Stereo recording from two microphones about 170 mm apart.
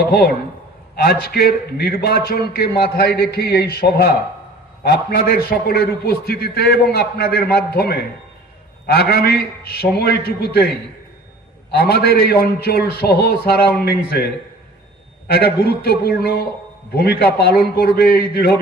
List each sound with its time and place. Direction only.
0.0 s a man's voice: 65° left (ahead or behind)
11.7 s speech: 65° left (ahead or behind)
15.3 s a man's voice: 70° left (ahead or behind)